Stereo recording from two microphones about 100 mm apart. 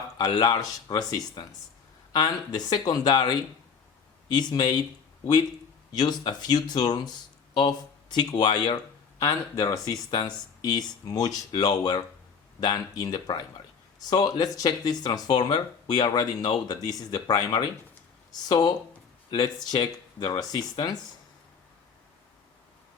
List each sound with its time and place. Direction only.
0.2 s speech: 45° left (ahead or behind)
5.9 s speech: 45° left (ahead or behind)
9.2 s speech: 35° left (ahead or behind)